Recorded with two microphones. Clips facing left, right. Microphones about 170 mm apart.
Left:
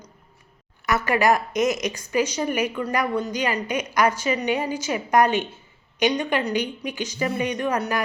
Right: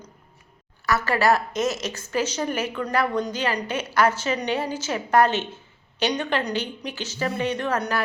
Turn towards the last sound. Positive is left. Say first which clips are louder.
# left 1 dB
turn(degrees=10)  # may be behind; listen again after turning